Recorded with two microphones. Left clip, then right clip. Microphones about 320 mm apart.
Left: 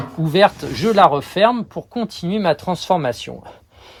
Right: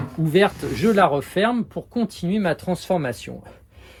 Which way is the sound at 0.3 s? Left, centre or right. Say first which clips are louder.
Left 5 dB; centre.